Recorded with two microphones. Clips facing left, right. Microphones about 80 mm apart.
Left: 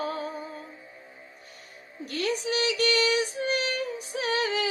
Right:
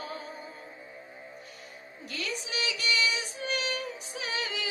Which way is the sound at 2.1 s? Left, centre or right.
Left.